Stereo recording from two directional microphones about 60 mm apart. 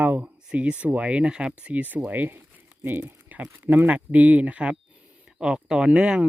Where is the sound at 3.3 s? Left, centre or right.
Right.